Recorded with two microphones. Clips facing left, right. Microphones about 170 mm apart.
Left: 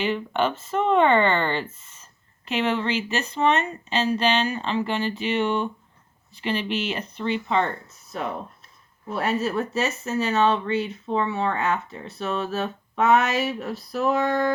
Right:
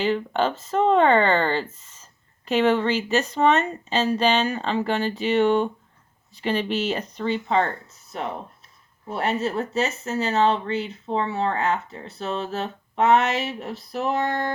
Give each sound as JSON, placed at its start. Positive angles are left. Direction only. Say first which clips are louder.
{"t": 0.0, "sound": "speech", "louder": "right 1 dB", "side_deg": -40}
{"t": 9.0, "sound": "speech", "louder": "even", "side_deg": -25}